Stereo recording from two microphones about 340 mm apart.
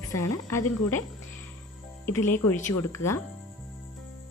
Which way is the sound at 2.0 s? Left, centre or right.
Centre.